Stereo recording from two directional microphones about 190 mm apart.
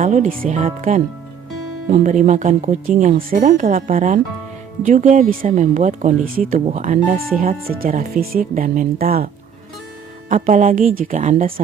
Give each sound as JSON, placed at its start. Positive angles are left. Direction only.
{"t": 0.0, "sound": "speech", "side_deg": -45}
{"t": 10.3, "sound": "speech", "side_deg": -45}